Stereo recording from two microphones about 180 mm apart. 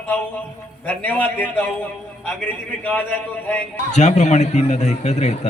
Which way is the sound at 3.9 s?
40° left (ahead or behind).